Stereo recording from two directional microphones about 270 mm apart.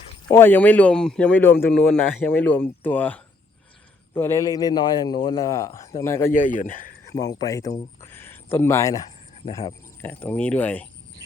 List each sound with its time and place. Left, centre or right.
0.3 s a man's voice: centre
6.3 s speech: left
7.3 s a man's voice: centre
8.0 s a sound: centre
9.5 s a man's voice: centre